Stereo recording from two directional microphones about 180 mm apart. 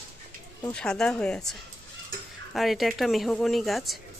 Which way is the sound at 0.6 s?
5° left (ahead or behind).